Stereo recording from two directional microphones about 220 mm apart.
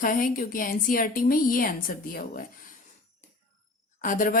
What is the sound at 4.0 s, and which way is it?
Speech, 35° left (ahead or behind).